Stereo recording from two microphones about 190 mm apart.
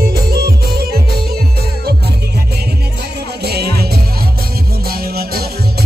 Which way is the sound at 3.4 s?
55° right (ahead or behind).